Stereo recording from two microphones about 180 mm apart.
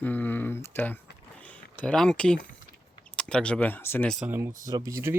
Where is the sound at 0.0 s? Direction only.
10° left (ahead or behind).